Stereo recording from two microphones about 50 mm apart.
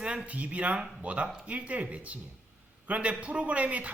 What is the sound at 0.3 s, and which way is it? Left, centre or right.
A man's voice, right.